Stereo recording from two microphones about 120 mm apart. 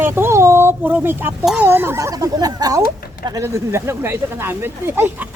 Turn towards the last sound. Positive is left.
turn(degrees=-20)  # may be behind; listen again after turning